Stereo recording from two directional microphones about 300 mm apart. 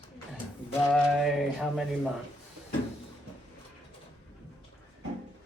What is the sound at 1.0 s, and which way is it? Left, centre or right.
Speech, centre.